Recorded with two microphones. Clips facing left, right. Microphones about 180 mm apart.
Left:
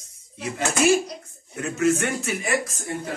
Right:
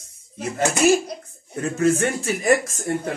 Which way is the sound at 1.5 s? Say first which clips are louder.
Right 2 dB; 35° right (ahead or behind).